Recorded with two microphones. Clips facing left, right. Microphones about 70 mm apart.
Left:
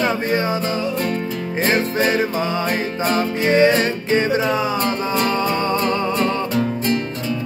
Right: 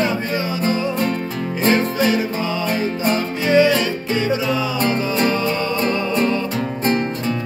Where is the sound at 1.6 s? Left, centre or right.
Left.